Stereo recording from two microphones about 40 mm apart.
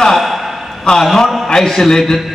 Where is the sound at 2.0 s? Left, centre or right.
Centre.